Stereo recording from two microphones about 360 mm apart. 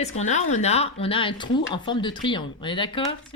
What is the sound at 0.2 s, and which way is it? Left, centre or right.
A woman's voice, centre.